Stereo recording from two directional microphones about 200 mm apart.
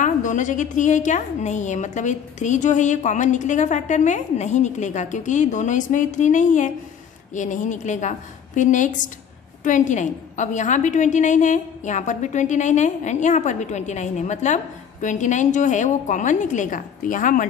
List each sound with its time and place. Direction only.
0.0 s a woman's voice: 40° left (ahead or behind)